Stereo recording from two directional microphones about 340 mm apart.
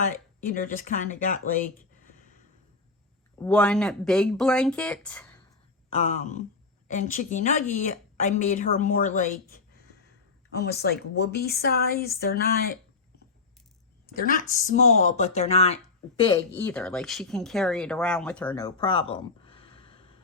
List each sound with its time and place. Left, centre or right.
0.4 s a woman's voice: left
3.3 s speech: centre
5.9 s a woman's voice: centre
14.1 s speech: left